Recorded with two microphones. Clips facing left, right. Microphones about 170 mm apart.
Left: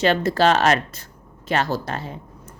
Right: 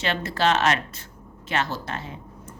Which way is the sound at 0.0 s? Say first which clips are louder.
Left 6 dB; 40° left (ahead or behind).